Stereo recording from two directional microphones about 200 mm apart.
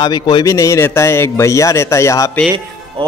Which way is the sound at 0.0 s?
20° left (ahead or behind).